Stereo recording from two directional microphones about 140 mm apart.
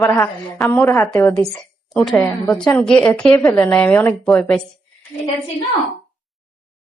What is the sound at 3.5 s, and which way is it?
Speech, 10° left (ahead or behind).